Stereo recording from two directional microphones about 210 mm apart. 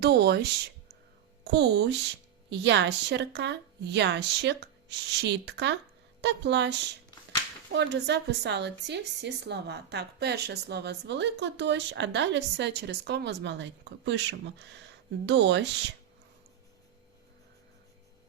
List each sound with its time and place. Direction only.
0.0 s speech: 50° right (ahead or behind)
1.5 s a woman's voice: 55° right (ahead or behind)